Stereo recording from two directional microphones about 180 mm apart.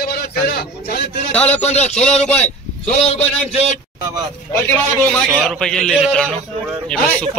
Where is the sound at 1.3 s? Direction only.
10° left (ahead or behind).